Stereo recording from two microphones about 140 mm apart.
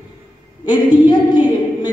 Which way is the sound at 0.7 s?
35° left (ahead or behind).